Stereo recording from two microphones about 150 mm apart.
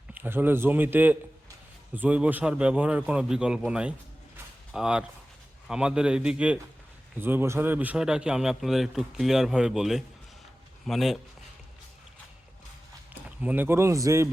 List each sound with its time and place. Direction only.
0.1 s a man's voice: 15° right (ahead or behind)
13.4 s a man's voice: 10° right (ahead or behind)